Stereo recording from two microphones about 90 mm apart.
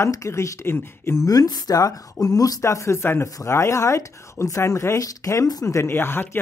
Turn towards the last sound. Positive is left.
turn(degrees=25)  # may be behind; listen again after turning